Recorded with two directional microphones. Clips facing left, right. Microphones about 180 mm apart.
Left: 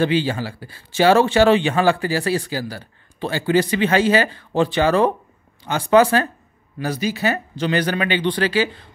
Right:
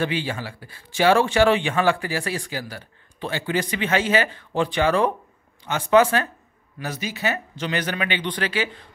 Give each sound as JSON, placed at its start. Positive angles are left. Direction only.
{"t": 0.0, "sound": "speech", "side_deg": 30}